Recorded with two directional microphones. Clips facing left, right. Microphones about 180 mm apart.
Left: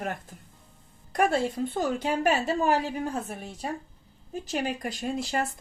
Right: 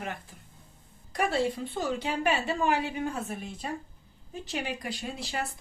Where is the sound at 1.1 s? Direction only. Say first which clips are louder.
Left 3 dB; 50° left (ahead or behind).